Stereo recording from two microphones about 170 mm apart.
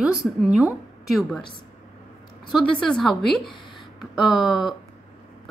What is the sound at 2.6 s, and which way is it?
A woman's voice, 5° left (ahead or behind).